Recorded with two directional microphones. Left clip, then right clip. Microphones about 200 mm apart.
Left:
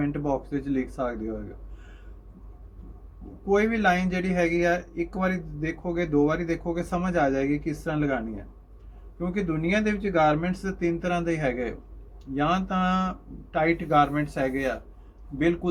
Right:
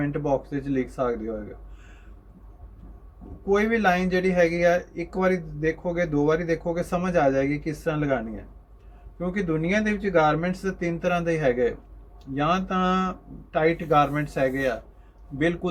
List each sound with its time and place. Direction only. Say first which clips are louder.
0.0 s a man's voice: right 2 dB; 20° right (ahead or behind)
3.4 s a man's voice: right 1 dB; 20° right (ahead or behind)